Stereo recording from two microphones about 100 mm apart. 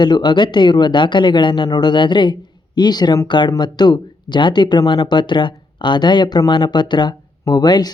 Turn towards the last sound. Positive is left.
turn(degrees=45)  # may be behind; listen again after turning